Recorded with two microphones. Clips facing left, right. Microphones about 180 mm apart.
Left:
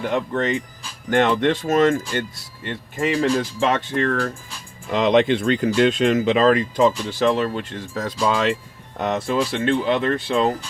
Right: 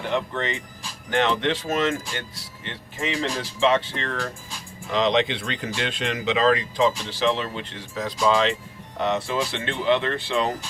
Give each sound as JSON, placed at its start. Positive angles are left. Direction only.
{"t": 0.1, "sound": "speech", "side_deg": 45}